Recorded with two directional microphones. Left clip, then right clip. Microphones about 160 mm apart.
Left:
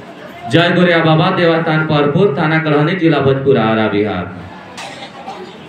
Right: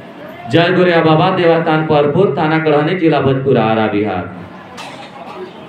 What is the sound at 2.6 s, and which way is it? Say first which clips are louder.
Speech: right 1 dB; 45° right (ahead or behind).